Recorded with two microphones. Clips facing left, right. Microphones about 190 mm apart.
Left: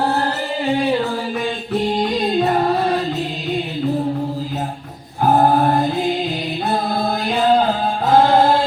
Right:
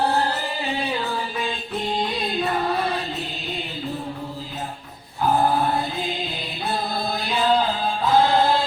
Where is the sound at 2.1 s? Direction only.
45° left (ahead or behind).